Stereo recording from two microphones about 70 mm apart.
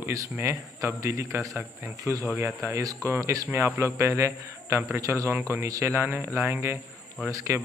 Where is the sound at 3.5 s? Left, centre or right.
Right.